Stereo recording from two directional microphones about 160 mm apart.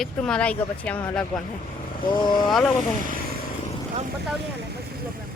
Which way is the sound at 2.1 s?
30° left (ahead or behind).